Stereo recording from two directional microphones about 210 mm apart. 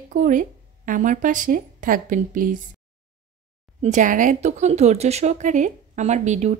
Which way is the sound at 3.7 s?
35° right (ahead or behind).